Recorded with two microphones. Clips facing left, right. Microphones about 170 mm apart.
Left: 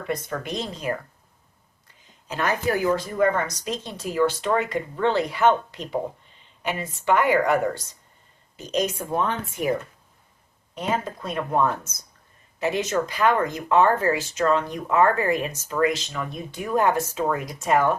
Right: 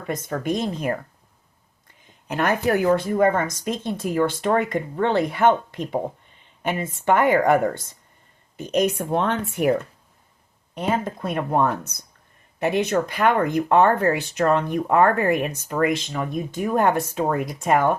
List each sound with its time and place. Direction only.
0.1 s speech: 45° right (ahead or behind)
2.2 s speech: 60° right (ahead or behind)
10.8 s speech: 55° right (ahead or behind)